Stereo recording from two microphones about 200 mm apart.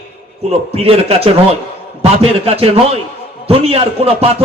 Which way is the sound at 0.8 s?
30° right (ahead or behind).